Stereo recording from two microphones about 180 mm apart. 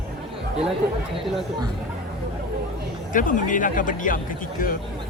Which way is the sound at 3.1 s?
50° left (ahead or behind).